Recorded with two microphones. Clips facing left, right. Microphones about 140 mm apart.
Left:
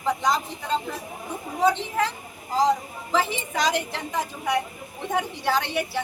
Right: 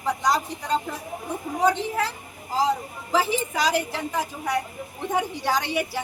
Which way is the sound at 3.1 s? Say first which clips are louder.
Right 1 dB; 10° right (ahead or behind).